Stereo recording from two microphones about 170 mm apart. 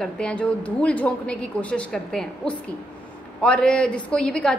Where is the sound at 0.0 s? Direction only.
5° left (ahead or behind).